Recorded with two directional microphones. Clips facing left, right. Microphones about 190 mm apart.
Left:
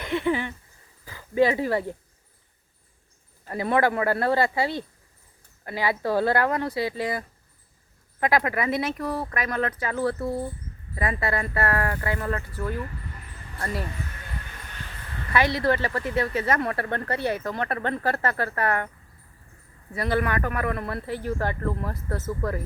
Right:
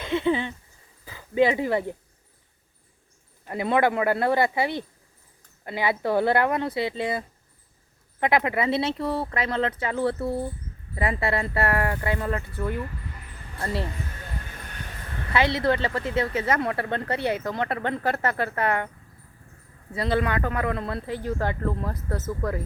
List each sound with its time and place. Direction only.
0.0 s a sound: 20° right (ahead or behind)
1.0 s speech: 15° right (ahead or behind)
3.4 s speech: 20° right (ahead or behind)
10.2 s speech: 5° right (ahead or behind)
10.9 s speech: 25° right (ahead or behind)
15.3 s speech: 20° right (ahead or behind)
19.9 s speech: 20° right (ahead or behind)